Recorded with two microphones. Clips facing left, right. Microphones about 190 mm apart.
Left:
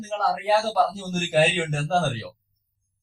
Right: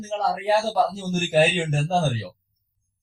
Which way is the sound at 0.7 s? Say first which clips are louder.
Right 1 dB; 20° right (ahead or behind).